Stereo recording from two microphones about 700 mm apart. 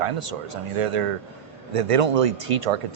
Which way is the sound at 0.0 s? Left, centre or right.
Right.